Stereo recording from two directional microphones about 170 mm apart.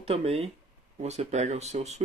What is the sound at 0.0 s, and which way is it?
Speech, 35° right (ahead or behind).